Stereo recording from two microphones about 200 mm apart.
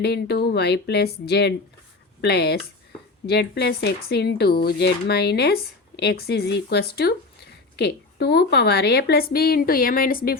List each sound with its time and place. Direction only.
0.0 s a woman's voice: 55° left (ahead or behind)